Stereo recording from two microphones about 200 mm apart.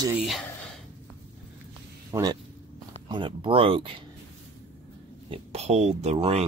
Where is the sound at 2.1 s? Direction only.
20° right (ahead or behind).